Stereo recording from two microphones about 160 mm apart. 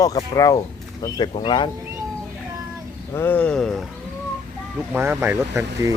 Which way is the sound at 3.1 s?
10° left (ahead or behind).